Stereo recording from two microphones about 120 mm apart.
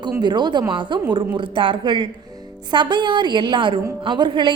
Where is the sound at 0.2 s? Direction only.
40° right (ahead or behind).